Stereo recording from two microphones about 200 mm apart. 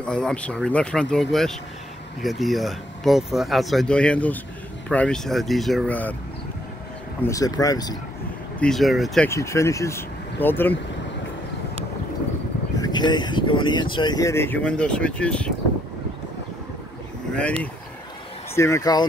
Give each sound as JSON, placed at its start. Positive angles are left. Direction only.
{"t": 0.0, "sound": "speech", "side_deg": 5}
{"t": 7.2, "sound": "speech", "side_deg": 15}
{"t": 8.5, "sound": "speech", "side_deg": 0}
{"t": 9.3, "sound": "speech", "side_deg": 15}
{"t": 12.7, "sound": "speech", "side_deg": 20}
{"t": 17.3, "sound": "vehicle", "side_deg": 5}
{"t": 18.6, "sound": "speech", "side_deg": 15}